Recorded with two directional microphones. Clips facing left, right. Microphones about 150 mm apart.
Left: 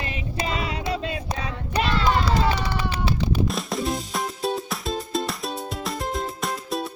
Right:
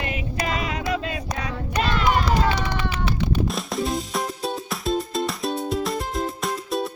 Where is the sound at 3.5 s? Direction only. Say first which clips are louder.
Right 1 dB; centre (ahead or behind).